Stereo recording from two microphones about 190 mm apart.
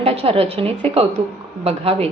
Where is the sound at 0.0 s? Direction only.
30° right (ahead or behind).